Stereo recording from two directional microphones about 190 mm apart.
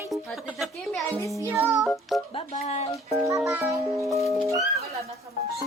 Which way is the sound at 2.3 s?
35° left (ahead or behind).